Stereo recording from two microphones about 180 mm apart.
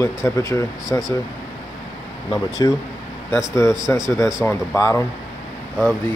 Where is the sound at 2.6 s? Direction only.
20° left (ahead or behind).